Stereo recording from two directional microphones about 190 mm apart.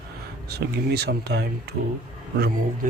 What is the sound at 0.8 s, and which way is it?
Speech, 60° right (ahead or behind).